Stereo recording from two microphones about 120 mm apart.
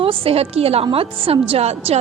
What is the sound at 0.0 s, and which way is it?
A woman's voice, 50° right (ahead or behind).